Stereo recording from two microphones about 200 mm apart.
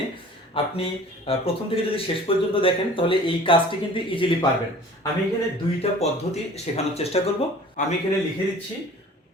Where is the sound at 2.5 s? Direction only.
25° left (ahead or behind).